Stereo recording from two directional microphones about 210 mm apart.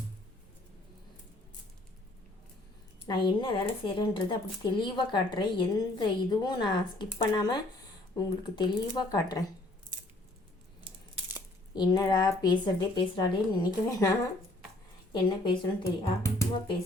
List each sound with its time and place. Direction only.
3.1 s speech: 25° left (ahead or behind)
11.7 s speech: 20° left (ahead or behind)
15.1 s speech: 20° left (ahead or behind)